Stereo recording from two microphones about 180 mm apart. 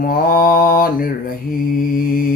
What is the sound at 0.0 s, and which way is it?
Mantra, 50° left (ahead or behind).